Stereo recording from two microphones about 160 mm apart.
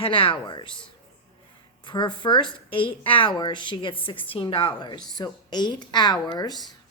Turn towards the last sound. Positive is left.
turn(degrees=25)  # may be behind; listen again after turning